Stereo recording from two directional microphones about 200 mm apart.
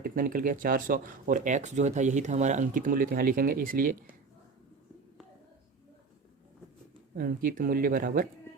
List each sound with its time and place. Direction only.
0.0 s speech: 45° right (ahead or behind)
7.2 s speech: 45° right (ahead or behind)